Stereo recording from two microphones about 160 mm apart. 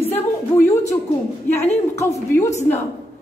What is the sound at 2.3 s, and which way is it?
Speech, 15° left (ahead or behind).